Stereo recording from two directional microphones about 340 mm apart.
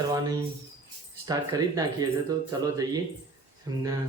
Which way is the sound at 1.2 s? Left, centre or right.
Centre.